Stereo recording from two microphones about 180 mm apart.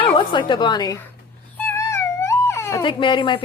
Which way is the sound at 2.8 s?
25° left (ahead or behind).